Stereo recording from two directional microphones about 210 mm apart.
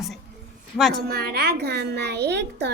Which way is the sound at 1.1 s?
50° right (ahead or behind).